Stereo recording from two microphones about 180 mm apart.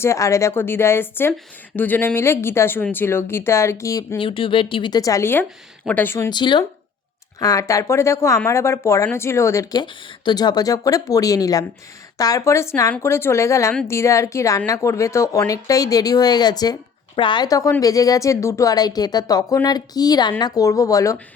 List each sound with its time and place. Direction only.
0.0 s speech: 15° left (ahead or behind)
4.2 s speech: 30° left (ahead or behind)